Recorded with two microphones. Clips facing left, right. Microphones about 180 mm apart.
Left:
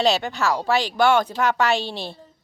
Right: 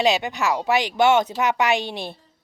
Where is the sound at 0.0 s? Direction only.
15° right (ahead or behind).